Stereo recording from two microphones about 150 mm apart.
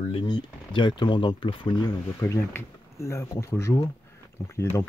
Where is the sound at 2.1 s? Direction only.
20° left (ahead or behind).